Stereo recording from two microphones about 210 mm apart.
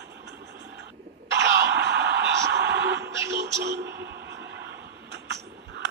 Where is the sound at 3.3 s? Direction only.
55° right (ahead or behind).